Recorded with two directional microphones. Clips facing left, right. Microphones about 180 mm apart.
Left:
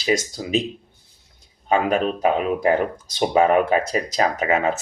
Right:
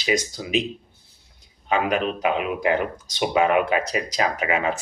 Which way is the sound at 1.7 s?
40° left (ahead or behind).